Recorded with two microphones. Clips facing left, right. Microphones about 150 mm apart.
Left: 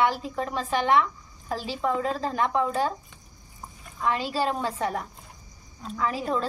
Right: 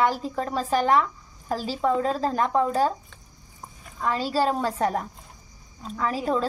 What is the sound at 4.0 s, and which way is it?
A woman's voice, 40° right (ahead or behind).